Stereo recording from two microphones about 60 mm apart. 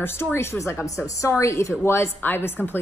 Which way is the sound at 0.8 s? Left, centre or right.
Left.